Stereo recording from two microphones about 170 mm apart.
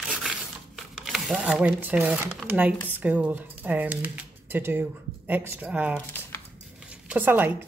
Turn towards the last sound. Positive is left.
turn(degrees=-10)  # may be behind; listen again after turning